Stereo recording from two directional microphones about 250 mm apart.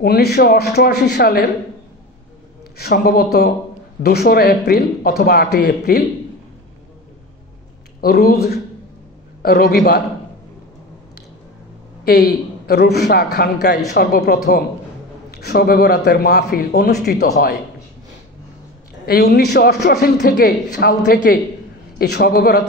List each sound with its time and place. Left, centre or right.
0.0 s a man's voice: left
2.8 s a man's voice: left
8.0 s a man's voice: left
12.0 s a man's voice: left
19.0 s a man's voice: left